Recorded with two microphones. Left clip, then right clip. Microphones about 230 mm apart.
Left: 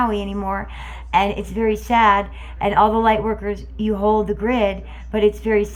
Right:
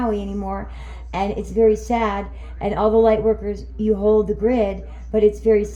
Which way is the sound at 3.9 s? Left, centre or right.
Left.